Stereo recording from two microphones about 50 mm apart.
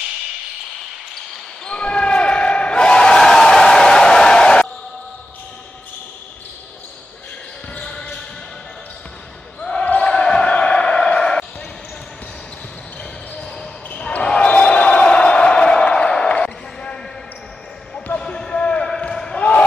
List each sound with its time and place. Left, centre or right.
1.7 s basketball bounce: left
7.8 s basketball bounce: centre
9.6 s basketball bounce: centre
13.8 s basketball bounce: left
18.0 s basketball bounce: left